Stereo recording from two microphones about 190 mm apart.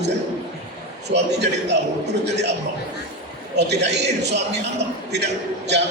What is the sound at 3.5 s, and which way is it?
A man's voice, 60° right (ahead or behind).